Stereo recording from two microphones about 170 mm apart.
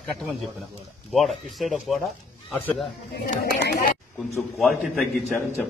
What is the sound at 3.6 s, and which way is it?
Speech, 65° left (ahead or behind).